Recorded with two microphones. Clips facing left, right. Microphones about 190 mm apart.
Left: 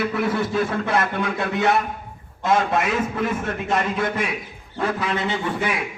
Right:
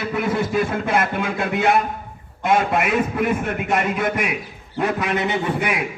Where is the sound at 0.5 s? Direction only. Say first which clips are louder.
Right 1 dB; 20° right (ahead or behind).